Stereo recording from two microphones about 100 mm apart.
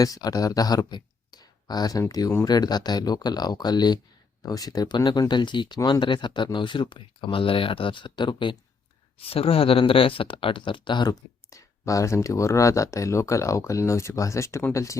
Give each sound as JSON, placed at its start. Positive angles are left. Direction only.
{"t": 0.0, "sound": "speech", "side_deg": 40}
{"t": 9.1, "sound": "speech", "side_deg": 75}